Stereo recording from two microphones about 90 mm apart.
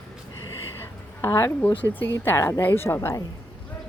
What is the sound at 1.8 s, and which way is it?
Speech, 20° left (ahead or behind).